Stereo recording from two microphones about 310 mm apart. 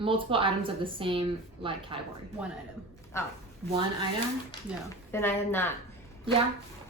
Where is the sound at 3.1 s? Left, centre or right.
Centre.